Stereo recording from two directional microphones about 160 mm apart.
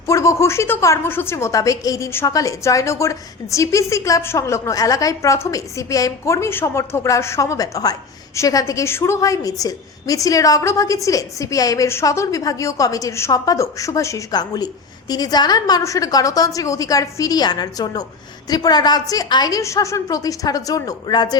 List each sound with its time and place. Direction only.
0.1 s a woman's voice: 20° left (ahead or behind)